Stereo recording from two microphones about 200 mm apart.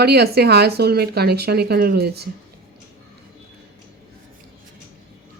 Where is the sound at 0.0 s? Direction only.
55° right (ahead or behind).